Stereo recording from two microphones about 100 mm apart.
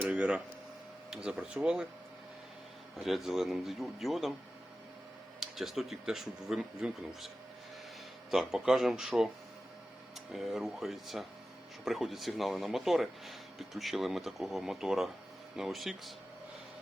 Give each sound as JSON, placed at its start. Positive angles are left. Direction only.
{"t": 0.1, "sound": "a sound", "side_deg": -10}
{"t": 1.1, "sound": "speech", "side_deg": -10}
{"t": 3.0, "sound": "speech", "side_deg": 0}
{"t": 5.4, "sound": "speech", "side_deg": 0}
{"t": 8.3, "sound": "speech", "side_deg": -5}
{"t": 10.3, "sound": "speech", "side_deg": 0}